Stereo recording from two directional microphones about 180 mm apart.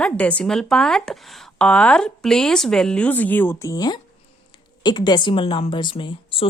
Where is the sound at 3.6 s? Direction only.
20° left (ahead or behind).